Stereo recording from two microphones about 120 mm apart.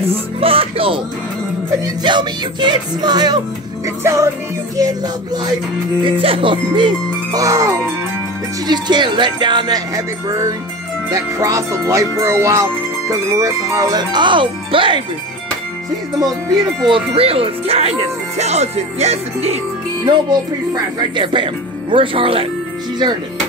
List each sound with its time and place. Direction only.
0.0 s speech: 55° right (ahead or behind)
2.0 s speech: 40° right (ahead or behind)
6.2 s speech: 50° right (ahead or behind)
7.3 s speech: 30° right (ahead or behind)
8.6 s speech: 35° right (ahead or behind)
11.1 s speech: 25° right (ahead or behind); by 15.0 s 45° right (ahead or behind)
16.8 s speech: 50° right (ahead or behind)
20.1 s speech: 40° right (ahead or behind)